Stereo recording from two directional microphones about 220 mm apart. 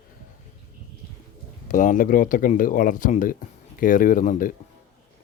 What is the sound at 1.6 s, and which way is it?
Speech, 35° left (ahead or behind).